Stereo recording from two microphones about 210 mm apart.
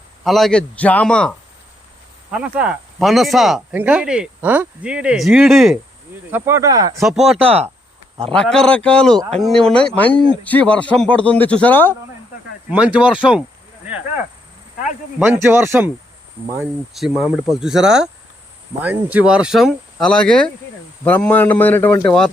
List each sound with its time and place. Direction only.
0.3 s speech: centre (ahead or behind)
6.3 s a man's voice: 10° right (ahead or behind)
6.9 s speech: centre (ahead or behind)
12.7 s speech: 5° right (ahead or behind)
15.2 s a man's voice: 10° right (ahead or behind)
16.9 s a man's voice: centre (ahead or behind)